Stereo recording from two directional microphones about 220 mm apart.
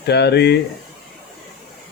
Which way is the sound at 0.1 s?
50° left (ahead or behind).